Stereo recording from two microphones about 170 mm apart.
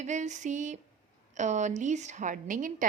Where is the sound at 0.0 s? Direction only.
45° right (ahead or behind).